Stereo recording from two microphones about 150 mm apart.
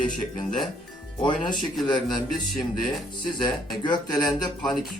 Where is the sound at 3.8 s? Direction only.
30° left (ahead or behind).